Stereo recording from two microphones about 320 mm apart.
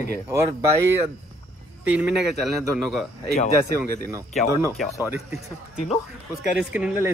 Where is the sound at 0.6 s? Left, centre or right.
Centre.